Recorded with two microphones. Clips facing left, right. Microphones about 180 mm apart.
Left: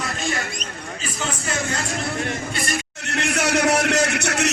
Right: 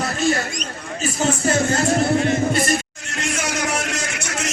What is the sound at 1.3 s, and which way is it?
Speech, 30° right (ahead or behind).